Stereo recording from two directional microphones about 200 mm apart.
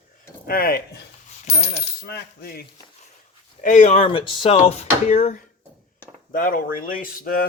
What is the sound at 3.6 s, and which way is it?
Speech, 40° left (ahead or behind).